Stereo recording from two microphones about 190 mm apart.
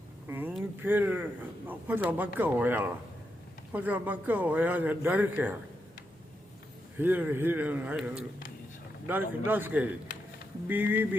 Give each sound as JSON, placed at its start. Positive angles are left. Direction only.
{"t": 0.3, "sound": "a man's voice", "side_deg": -10}
{"t": 7.0, "sound": "a man's voice", "side_deg": -10}